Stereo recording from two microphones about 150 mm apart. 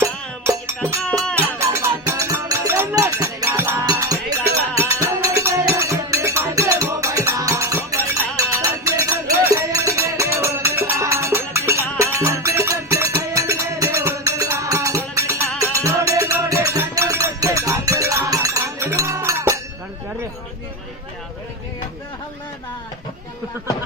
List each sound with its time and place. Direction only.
0.0 s music: 20° right (ahead or behind)